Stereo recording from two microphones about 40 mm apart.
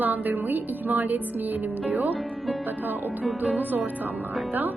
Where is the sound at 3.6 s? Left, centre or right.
Right.